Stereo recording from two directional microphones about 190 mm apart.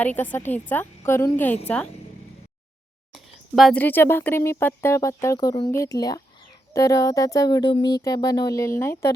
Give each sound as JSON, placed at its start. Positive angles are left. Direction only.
{"t": 0.0, "sound": "speech", "side_deg": 10}
{"t": 3.1, "sound": "speech", "side_deg": 0}